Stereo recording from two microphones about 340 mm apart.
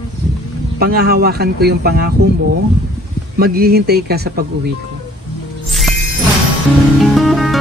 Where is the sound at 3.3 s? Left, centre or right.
Right.